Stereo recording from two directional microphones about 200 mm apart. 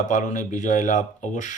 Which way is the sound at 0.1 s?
40° left (ahead or behind).